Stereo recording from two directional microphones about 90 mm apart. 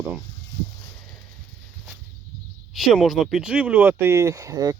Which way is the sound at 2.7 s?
Centre (ahead or behind).